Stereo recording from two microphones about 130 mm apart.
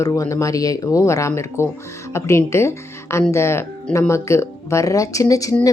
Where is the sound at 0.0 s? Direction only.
25° left (ahead or behind).